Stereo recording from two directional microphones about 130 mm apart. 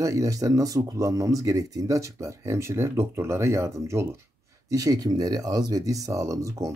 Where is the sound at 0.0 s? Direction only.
25° right (ahead or behind).